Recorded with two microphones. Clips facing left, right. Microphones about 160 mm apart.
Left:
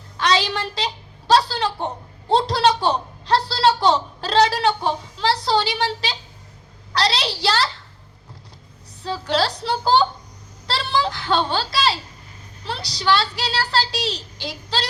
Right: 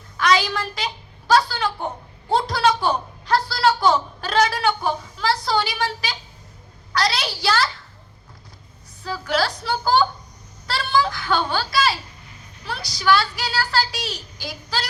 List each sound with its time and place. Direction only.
0.2 s a sound: 30° left (ahead or behind)
1.3 s a woman's voice: 30° left (ahead or behind)
9.0 s a child's voice: 30° left (ahead or behind)